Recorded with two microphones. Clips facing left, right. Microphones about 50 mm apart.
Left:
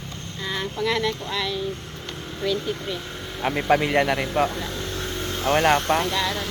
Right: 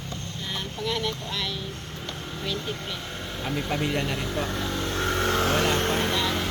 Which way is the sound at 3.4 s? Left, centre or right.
Left.